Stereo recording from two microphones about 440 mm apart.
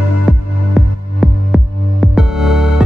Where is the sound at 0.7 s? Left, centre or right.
Centre.